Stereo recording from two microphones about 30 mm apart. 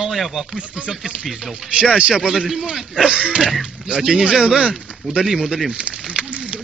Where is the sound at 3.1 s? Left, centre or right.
Right.